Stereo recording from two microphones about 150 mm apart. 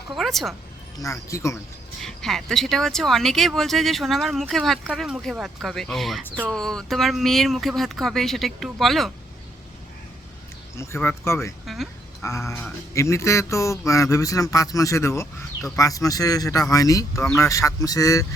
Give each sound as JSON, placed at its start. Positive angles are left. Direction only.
{"t": 0.2, "sound": "speech", "side_deg": 0}
{"t": 0.9, "sound": "speech", "side_deg": 20}
{"t": 2.0, "sound": "speech", "side_deg": 5}
{"t": 10.8, "sound": "speech", "side_deg": 15}
{"t": 11.6, "sound": "speech", "side_deg": 0}
{"t": 12.2, "sound": "speech", "side_deg": 20}